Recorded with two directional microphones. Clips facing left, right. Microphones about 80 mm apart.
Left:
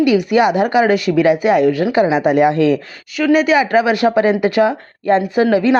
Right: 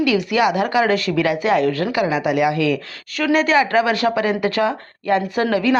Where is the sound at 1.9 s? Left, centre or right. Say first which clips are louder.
Left 6 dB; left.